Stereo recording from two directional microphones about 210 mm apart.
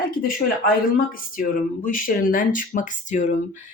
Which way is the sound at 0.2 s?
40° left (ahead or behind).